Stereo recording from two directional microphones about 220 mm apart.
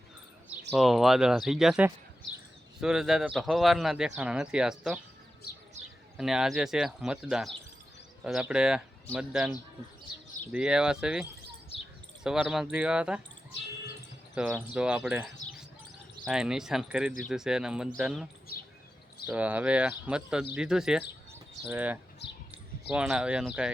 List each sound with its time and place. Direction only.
0.7 s speech: centre (ahead or behind)
6.1 s speech: centre (ahead or behind)
10.5 s speech: 5° right (ahead or behind)
14.3 s speech: 5° right (ahead or behind)
19.3 s speech: 5° right (ahead or behind)
22.2 s a sound: 50° left (ahead or behind)
22.9 s speech: 5° right (ahead or behind)